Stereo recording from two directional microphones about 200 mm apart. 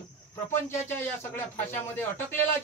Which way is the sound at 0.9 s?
10° left (ahead or behind).